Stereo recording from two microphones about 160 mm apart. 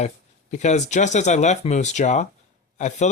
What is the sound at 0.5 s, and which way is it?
Speech, 45° left (ahead or behind).